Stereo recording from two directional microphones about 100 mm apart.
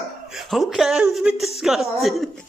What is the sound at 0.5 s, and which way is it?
Speech, centre (ahead or behind).